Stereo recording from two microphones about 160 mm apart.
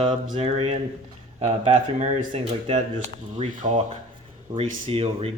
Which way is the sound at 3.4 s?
50° right (ahead or behind).